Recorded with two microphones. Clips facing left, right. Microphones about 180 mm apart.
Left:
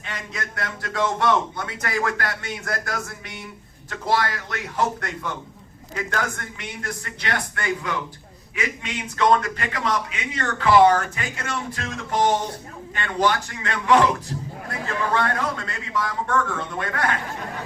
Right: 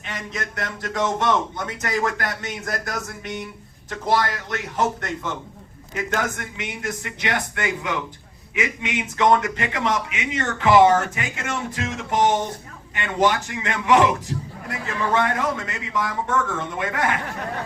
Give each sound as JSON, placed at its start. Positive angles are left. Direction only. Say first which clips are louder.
{"t": 0.0, "sound": "a man's voice", "louder": "right 2 dB", "side_deg": -20}